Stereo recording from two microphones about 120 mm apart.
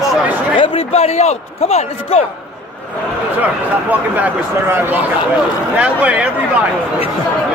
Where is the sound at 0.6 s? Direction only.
60° left (ahead or behind).